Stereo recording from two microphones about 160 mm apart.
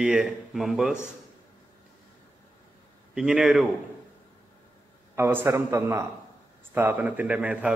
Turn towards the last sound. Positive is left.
turn(degrees=-10)  # may be behind; listen again after turning